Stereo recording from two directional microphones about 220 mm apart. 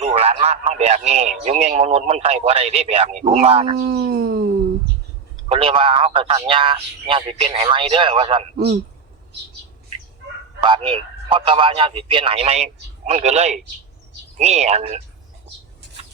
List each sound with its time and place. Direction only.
0.0 s a man's voice: 30° right (ahead or behind)
3.8 s speech: 45° right (ahead or behind)
5.5 s a man's voice: 25° right (ahead or behind)
10.6 s a man's voice: 20° right (ahead or behind)